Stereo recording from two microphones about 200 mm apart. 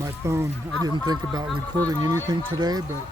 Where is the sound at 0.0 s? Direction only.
15° right (ahead or behind).